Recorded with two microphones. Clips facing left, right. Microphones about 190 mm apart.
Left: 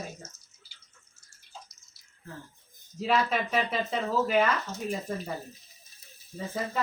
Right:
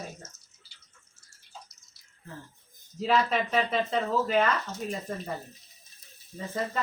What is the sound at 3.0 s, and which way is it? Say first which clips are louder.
Speech: right 1 dB; centre (ahead or behind).